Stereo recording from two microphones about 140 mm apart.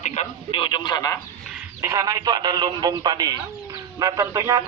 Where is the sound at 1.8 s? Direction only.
20° right (ahead or behind).